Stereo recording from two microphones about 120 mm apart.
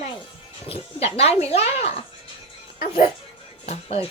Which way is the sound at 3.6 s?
60° left (ahead or behind).